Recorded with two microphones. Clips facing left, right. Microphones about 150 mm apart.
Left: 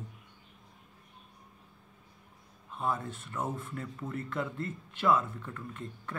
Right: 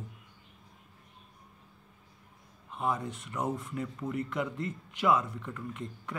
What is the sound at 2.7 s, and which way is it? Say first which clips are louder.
Speech: right 1 dB; 15° right (ahead or behind).